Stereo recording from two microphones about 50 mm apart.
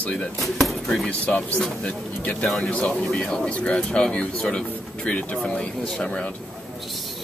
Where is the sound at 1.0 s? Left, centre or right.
Left.